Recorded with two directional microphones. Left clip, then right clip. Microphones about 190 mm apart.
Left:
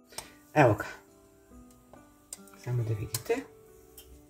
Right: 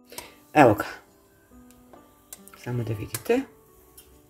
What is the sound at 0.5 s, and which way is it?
Speech, 35° right (ahead or behind).